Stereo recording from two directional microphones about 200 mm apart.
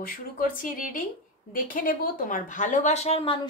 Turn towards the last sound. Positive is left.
turn(degrees=30)  # may be behind; listen again after turning